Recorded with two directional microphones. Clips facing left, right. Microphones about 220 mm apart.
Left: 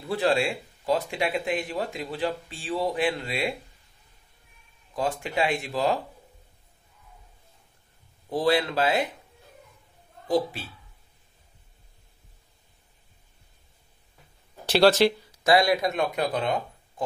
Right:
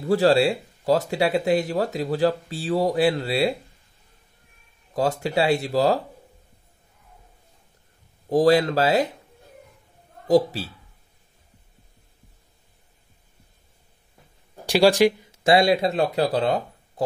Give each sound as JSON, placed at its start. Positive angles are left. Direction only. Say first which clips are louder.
{"t": 0.0, "sound": "speech", "louder": "right 6 dB", "side_deg": -40}
{"t": 4.9, "sound": "speech", "louder": "right 5 dB", "side_deg": -40}
{"t": 8.3, "sound": "speech", "louder": "right 6 dB", "side_deg": -40}
{"t": 10.2, "sound": "a woman's voice", "louder": "right 7 dB", "side_deg": -40}
{"t": 14.7, "sound": "speech", "louder": "right 2 dB", "side_deg": -10}
{"t": 15.3, "sound": "speech", "louder": "right 2 dB", "side_deg": -25}